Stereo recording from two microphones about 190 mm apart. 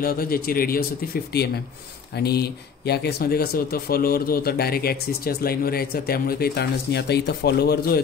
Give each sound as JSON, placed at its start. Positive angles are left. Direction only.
{"t": 0.0, "sound": "speech", "side_deg": 50}